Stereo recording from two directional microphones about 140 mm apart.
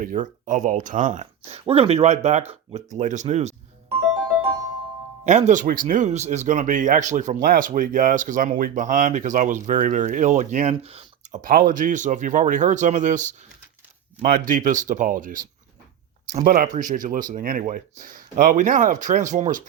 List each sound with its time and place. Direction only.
0.0 s speech: 70° right (ahead or behind); by 2.8 s 50° right (ahead or behind)
3.0 s speech: 60° right (ahead or behind)
5.2 s speech: 60° right (ahead or behind)
11.4 s speech: 85° right; by 13.3 s 65° right (ahead or behind)
14.2 s speech: 80° right
16.5 s speech: 75° right (ahead or behind)